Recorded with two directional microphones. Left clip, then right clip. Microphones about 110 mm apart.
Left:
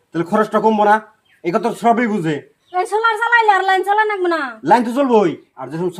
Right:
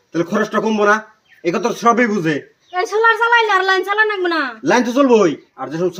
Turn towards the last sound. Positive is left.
turn(degrees=30)  # may be behind; listen again after turning